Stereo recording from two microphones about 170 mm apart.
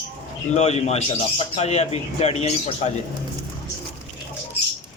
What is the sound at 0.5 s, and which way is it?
Speech, 40° left (ahead or behind).